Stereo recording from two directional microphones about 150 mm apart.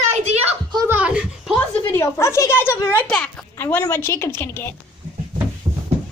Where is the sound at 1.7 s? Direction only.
15° left (ahead or behind).